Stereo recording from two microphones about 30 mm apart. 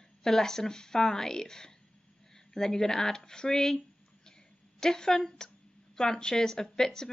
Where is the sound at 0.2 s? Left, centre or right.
Centre.